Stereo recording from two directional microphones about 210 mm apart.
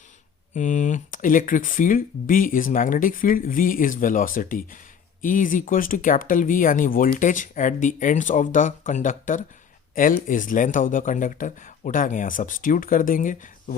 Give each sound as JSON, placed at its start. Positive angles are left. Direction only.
{"t": 0.5, "sound": "speech", "side_deg": 35}